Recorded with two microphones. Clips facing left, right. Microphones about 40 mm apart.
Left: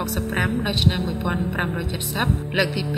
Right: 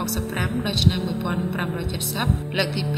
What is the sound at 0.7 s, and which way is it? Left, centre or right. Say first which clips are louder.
A woman's voice: even; centre.